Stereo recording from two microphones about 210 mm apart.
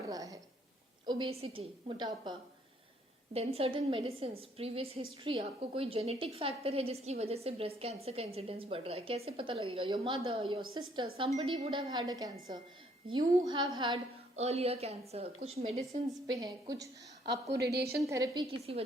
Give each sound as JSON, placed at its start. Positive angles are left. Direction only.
{"t": 0.1, "sound": "a sound", "side_deg": -15}
{"t": 1.0, "sound": "a woman's voice", "side_deg": -25}
{"t": 3.3, "sound": "a woman's voice", "side_deg": -30}
{"t": 16.0, "sound": "a woman's voice", "side_deg": -20}
{"t": 17.5, "sound": "a woman's voice", "side_deg": -50}
{"t": 18.0, "sound": "a woman's voice", "side_deg": -15}